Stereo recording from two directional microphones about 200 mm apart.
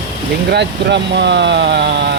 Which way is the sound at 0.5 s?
60° right (ahead or behind).